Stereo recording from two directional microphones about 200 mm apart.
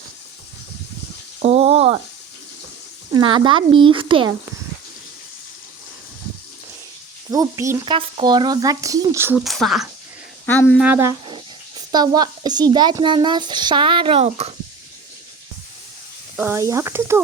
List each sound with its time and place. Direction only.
1.4 s speech: 30° right (ahead or behind)
3.1 s speech: 25° right (ahead or behind)
7.3 s speech: 15° right (ahead or behind)
9.4 s speech: centre (ahead or behind)
10.8 s a woman's voice: 10° right (ahead or behind); by 14.5 s 30° right (ahead or behind)
16.4 s speech: 15° right (ahead or behind)